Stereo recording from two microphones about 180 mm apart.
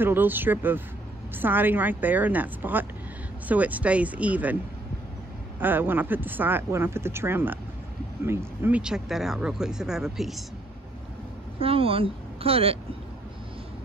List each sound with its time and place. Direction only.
0.0 s speech: 10° right (ahead or behind)
5.6 s speech: 10° right (ahead or behind)
11.6 s speech: 30° right (ahead or behind)